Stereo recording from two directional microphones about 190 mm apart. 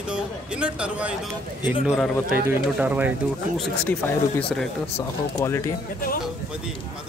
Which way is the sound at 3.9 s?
5° left (ahead or behind).